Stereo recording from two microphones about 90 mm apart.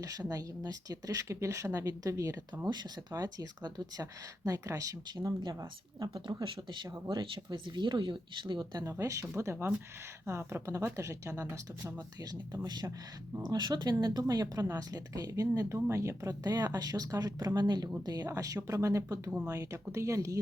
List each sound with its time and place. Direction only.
0.0 s speech: 40° right (ahead or behind)
3.1 s speech: 45° right (ahead or behind)
6.1 s speech: 65° right (ahead or behind)
8.8 s speech: 35° right (ahead or behind)